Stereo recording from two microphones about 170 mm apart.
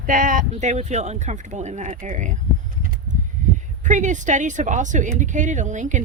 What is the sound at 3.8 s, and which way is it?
Speech, 45° right (ahead or behind).